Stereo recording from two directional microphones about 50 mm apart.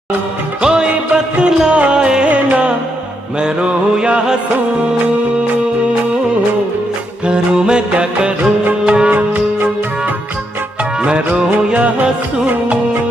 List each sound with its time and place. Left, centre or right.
0.6 s music: centre
3.3 s mantra: centre
7.2 s music: centre
11.0 s music: right